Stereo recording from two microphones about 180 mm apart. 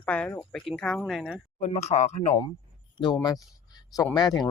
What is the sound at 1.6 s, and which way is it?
Speech, 35° left (ahead or behind).